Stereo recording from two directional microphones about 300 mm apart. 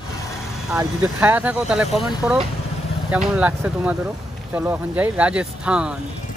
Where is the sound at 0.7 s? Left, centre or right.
Centre.